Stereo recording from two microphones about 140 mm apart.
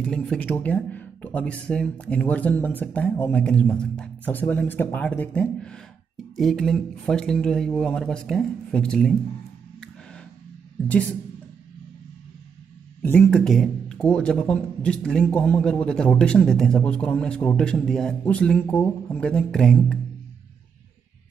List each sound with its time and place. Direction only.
0.0 s speech: 5° left (ahead or behind)
10.9 s speech: 10° left (ahead or behind)
13.0 s speech: 15° left (ahead or behind)
13.3 s speech: 5° left (ahead or behind)